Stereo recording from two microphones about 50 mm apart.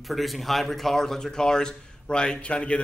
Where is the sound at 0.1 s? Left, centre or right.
Centre.